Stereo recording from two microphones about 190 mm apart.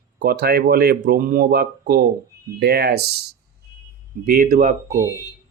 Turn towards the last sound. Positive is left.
turn(degrees=-15)  # may be behind; listen again after turning